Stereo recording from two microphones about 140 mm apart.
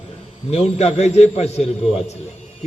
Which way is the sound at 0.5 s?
50° left (ahead or behind).